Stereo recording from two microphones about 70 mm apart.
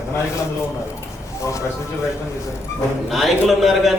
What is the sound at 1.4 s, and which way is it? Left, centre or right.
Speech, left.